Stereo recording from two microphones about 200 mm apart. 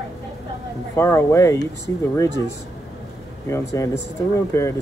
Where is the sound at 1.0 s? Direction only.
15° left (ahead or behind).